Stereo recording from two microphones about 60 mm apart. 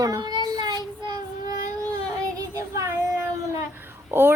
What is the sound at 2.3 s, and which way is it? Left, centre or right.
Child singing, right.